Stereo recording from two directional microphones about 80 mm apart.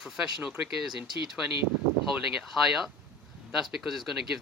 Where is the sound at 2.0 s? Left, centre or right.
Centre.